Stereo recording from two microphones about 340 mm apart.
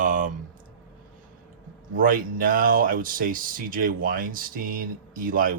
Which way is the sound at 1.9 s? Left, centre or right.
Right.